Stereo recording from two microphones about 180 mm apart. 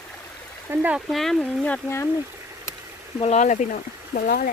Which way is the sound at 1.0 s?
Centre (ahead or behind).